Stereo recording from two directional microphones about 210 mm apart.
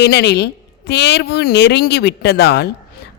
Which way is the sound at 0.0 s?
50° left (ahead or behind).